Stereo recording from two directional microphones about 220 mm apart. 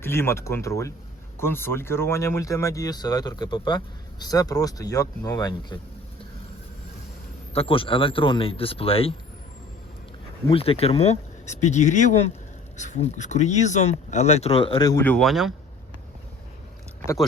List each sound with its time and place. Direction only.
0.0 s speech: 10° left (ahead or behind)
7.5 s speech: 25° left (ahead or behind)
10.5 s speech: 25° left (ahead or behind); by 15.5 s centre (ahead or behind)